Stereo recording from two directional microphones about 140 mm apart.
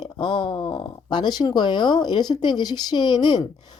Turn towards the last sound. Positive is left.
turn(degrees=35)  # may be behind; listen again after turning